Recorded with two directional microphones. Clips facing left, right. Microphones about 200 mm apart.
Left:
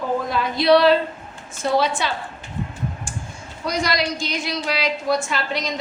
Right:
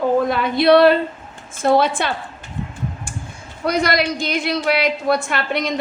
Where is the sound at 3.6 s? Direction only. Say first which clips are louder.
Right 4 dB; 60° right (ahead or behind).